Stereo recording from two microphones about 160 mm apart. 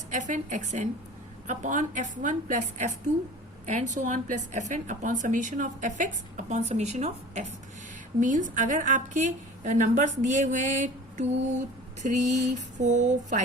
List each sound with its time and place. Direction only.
0.1 s a woman's voice: 50° right (ahead or behind)